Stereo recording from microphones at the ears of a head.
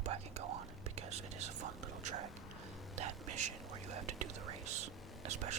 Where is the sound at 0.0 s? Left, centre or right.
Right.